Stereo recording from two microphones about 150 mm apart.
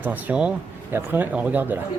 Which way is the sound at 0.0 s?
10° right (ahead or behind).